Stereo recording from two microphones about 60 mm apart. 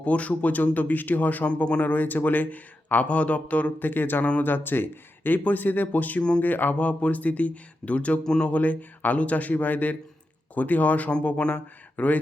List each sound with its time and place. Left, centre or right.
0.0 s speech: left
1.5 s speech: centre